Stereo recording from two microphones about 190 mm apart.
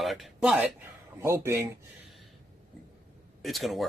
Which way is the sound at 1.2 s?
15° right (ahead or behind).